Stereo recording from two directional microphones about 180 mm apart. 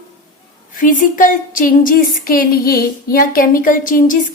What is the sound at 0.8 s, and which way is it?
Speech, 50° left (ahead or behind).